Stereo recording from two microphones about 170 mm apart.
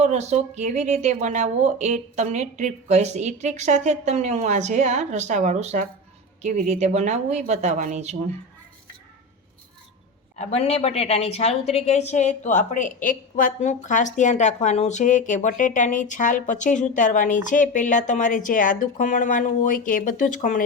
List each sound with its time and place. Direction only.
0.0 s speech: 40° right (ahead or behind)
10.3 s a woman's voice: 40° left (ahead or behind)